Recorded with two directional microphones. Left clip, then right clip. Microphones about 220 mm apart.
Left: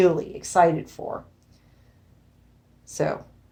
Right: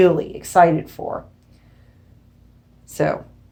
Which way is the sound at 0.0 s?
30° left (ahead or behind).